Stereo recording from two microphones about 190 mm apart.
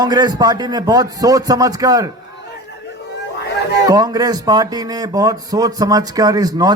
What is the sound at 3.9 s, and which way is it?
Speech, 20° right (ahead or behind).